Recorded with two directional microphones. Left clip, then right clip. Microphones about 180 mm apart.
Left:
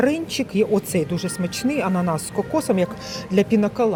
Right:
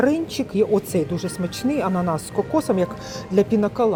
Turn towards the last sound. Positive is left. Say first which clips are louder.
# even
turn(degrees=-5)  # may be behind; listen again after turning